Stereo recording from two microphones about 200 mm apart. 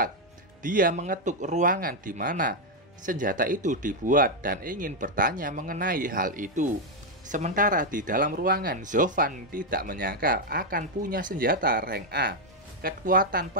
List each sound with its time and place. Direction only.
0.6 s speech: 45° right (ahead or behind)